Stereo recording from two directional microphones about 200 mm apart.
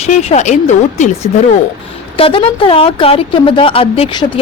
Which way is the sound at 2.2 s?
25° left (ahead or behind).